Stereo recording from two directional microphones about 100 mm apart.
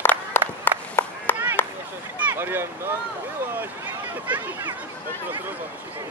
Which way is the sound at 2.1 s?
20° right (ahead or behind).